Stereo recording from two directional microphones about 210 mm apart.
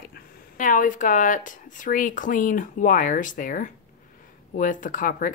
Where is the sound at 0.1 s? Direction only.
40° left (ahead or behind).